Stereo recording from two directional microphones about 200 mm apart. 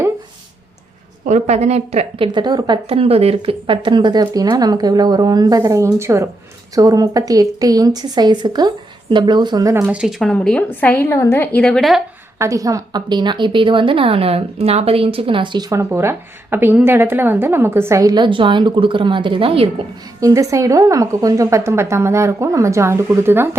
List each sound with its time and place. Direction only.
1.2 s a woman's voice: 35° right (ahead or behind); by 12.0 s centre (ahead or behind)
12.4 s a woman's voice: 15° right (ahead or behind)
20.2 s a woman's voice: 15° right (ahead or behind)